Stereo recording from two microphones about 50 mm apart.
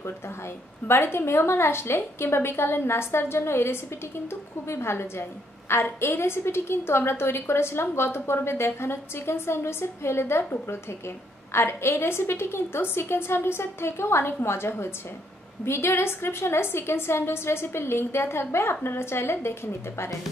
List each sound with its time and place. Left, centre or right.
0.8 s a woman's voice: left
11.5 s a woman's voice: left